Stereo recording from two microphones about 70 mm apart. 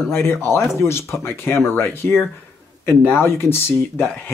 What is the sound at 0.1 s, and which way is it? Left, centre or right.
Speech, left.